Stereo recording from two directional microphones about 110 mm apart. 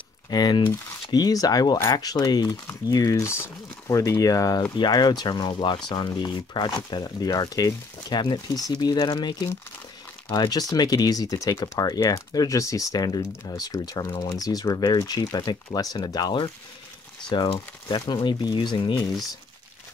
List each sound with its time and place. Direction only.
0.3 s speech: 40° left (ahead or behind)
10.3 s speech: 35° left (ahead or behind)